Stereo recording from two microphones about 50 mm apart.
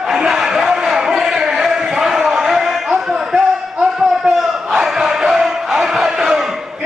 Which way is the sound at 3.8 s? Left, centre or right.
Centre.